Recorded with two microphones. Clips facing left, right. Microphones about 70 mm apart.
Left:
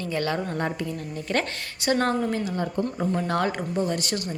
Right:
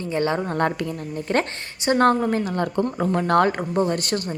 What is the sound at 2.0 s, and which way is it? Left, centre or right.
Speech, right.